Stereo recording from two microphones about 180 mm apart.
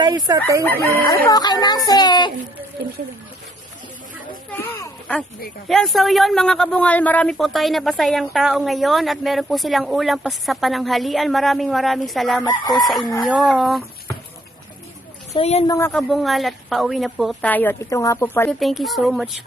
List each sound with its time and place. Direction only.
0.3 s speech: 15° right (ahead or behind)
0.6 s speech: 15° left (ahead or behind)
4.5 s a sound: 10° left (ahead or behind)
5.6 s speech: centre (ahead or behind)
12.4 s speech: 20° left (ahead or behind)
12.9 s speech: centre (ahead or behind)
15.3 s a woman's voice: 35° left (ahead or behind)
15.6 s speech: 20° left (ahead or behind)
15.9 s speech: centre (ahead or behind)
18.6 s speech: centre (ahead or behind)